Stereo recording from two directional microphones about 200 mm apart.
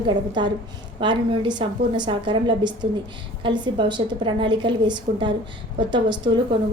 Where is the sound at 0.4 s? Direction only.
20° right (ahead or behind).